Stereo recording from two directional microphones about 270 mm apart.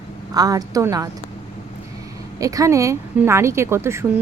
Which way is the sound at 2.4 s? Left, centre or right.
Centre.